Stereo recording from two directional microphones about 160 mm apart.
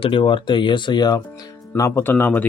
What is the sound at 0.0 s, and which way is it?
Speech, 30° left (ahead or behind).